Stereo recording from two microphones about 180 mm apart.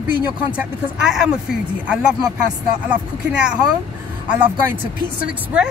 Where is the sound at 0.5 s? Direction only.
5° right (ahead or behind).